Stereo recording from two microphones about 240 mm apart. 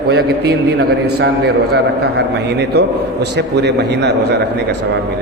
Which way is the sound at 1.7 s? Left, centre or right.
Right.